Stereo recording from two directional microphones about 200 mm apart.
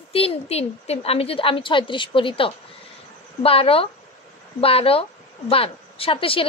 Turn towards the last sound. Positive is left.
turn(degrees=25)  # may be behind; listen again after turning